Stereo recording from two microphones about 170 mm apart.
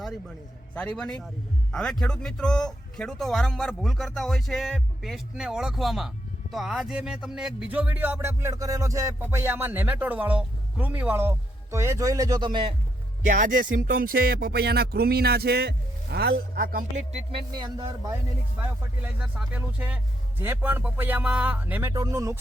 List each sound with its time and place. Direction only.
0.7 s speech: 5° left (ahead or behind); by 12.7 s 30° right (ahead or behind)
13.2 s music: 50° right (ahead or behind)
17.3 s speech: 25° right (ahead or behind)
19.0 s speech: 10° right (ahead or behind)